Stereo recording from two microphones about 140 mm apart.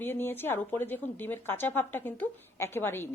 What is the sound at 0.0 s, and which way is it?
A woman's voice, 15° left (ahead or behind).